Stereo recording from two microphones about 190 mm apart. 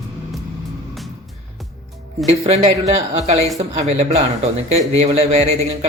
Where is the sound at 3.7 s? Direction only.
35° right (ahead or behind).